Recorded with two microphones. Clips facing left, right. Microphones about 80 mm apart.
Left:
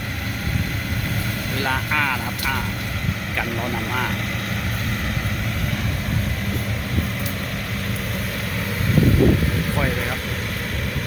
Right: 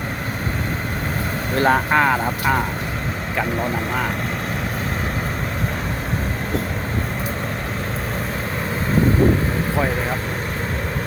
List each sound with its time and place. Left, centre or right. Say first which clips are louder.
1.5 s speech: right 7 dB; right
3.3 s speech: right 4 dB; centre